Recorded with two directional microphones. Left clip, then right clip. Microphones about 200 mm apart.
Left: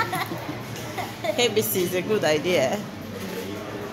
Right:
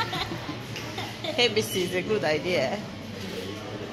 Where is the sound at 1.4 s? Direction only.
15° left (ahead or behind).